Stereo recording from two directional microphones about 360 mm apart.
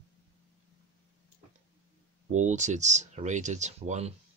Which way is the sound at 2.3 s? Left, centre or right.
Centre.